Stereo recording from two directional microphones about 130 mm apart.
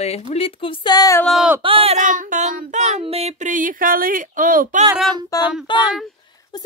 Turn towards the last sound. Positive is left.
turn(degrees=40)  # may be behind; listen again after turning